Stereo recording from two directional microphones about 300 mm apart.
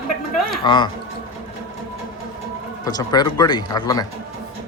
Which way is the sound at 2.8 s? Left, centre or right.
Centre.